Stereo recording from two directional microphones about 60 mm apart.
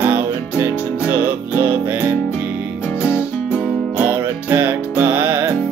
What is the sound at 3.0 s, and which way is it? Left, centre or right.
Music, left.